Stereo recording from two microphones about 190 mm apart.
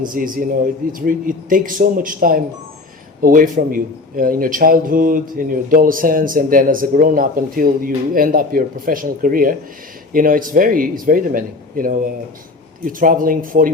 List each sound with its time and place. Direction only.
0.1 s speech: 45° right (ahead or behind)